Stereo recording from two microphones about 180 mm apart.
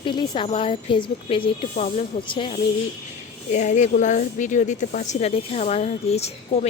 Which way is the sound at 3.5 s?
40° left (ahead or behind).